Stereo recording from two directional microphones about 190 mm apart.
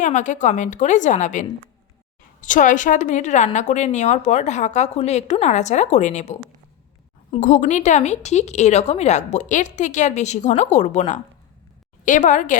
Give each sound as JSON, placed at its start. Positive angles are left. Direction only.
{"t": 0.0, "sound": "a woman's voice", "side_deg": 40}
{"t": 2.5, "sound": "a woman's voice", "side_deg": 45}